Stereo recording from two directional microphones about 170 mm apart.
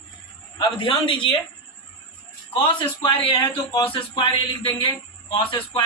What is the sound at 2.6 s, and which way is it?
A man's voice, 30° left (ahead or behind).